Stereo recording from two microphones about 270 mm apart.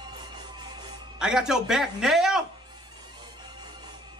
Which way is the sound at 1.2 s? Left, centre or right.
Centre.